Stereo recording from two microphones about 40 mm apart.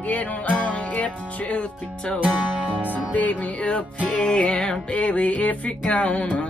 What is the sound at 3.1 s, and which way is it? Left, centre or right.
Music, left.